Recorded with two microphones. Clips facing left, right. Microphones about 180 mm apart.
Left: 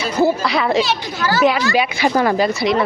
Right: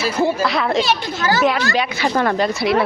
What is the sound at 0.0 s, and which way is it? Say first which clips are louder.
Speech: left 1 dB; centre (ahead or behind).